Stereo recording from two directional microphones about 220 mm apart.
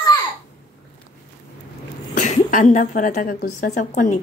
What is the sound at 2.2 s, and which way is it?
A woman's voice, 35° left (ahead or behind).